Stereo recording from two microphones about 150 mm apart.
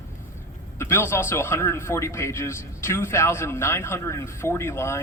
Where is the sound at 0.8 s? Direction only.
15° left (ahead or behind).